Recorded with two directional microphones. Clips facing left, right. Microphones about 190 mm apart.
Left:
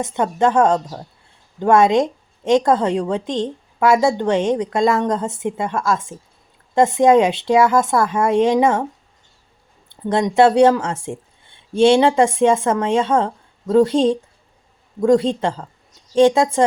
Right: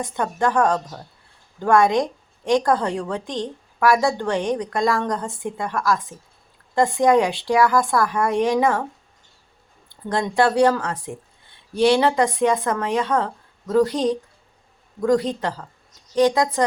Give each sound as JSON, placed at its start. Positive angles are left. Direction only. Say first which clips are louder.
{"t": 0.0, "sound": "a woman's voice", "louder": "left 5 dB", "side_deg": 20}
{"t": 9.9, "sound": "a woman's voice", "louder": "left 5 dB", "side_deg": 25}